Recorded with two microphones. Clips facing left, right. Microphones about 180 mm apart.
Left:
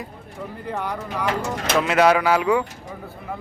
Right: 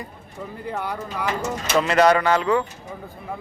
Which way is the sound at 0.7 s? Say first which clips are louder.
Left 1 dB; 10° right (ahead or behind).